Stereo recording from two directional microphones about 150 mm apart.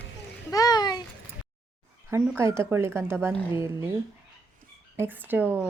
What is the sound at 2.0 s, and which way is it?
Speech, 20° right (ahead or behind).